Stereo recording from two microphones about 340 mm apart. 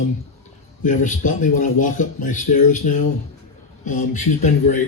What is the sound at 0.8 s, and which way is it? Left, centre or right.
Speech, left.